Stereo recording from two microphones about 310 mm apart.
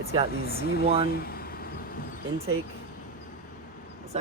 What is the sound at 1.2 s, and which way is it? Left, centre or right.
Vehicle, left.